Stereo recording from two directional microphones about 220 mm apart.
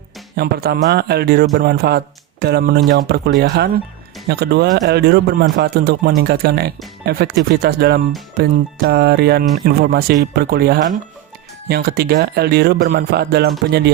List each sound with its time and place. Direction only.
0.3 s speech: 45° right (ahead or behind)